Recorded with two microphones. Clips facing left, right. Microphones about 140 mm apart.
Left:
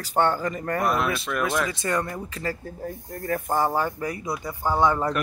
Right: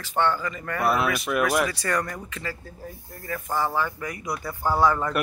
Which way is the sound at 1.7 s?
20° left (ahead or behind).